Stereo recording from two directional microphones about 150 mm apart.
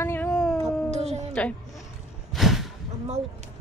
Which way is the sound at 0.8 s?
45° right (ahead or behind).